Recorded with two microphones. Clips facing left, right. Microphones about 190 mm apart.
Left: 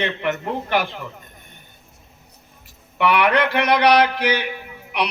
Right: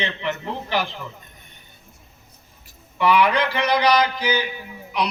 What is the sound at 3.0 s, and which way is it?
A man's voice, 60° left (ahead or behind).